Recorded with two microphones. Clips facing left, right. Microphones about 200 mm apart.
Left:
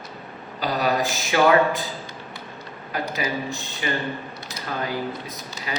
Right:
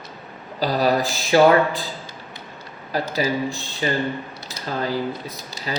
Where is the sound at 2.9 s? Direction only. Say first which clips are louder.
Right 4 dB; 35° right (ahead or behind).